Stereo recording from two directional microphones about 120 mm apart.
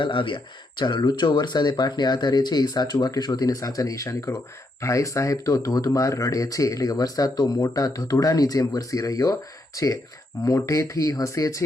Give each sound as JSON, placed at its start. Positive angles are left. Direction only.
{"t": 0.0, "sound": "speech", "side_deg": 45}